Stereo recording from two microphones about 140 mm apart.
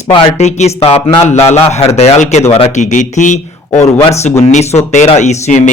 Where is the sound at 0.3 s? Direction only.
55° left (ahead or behind).